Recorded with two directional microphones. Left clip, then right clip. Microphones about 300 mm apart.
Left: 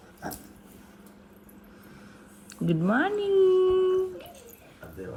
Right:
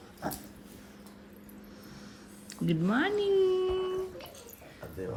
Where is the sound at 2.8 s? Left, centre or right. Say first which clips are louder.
Left 3 dB; centre.